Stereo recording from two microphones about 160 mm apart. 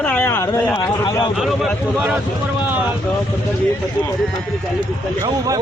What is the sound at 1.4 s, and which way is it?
Speech, centre (ahead or behind).